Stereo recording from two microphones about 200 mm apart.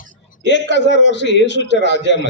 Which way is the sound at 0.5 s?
65° left (ahead or behind).